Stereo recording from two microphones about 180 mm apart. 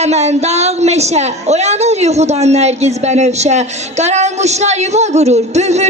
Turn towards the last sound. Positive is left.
turn(degrees=-40)  # may be behind; listen again after turning